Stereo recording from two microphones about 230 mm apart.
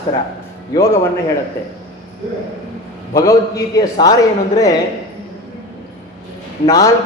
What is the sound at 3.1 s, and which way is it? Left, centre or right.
A man's voice, centre.